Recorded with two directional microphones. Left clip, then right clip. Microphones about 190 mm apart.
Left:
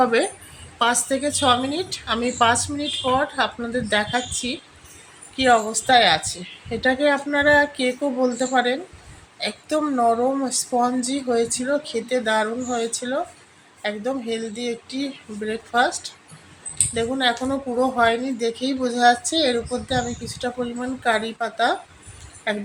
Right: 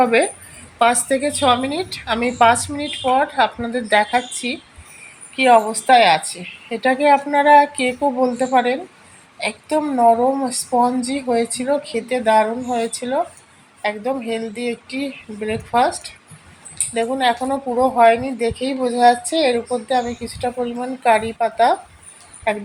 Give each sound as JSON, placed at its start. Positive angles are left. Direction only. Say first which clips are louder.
{"t": 0.0, "sound": "speech", "louder": "right 4 dB", "side_deg": -5}